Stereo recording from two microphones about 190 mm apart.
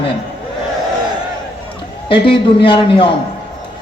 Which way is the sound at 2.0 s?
25° left (ahead or behind).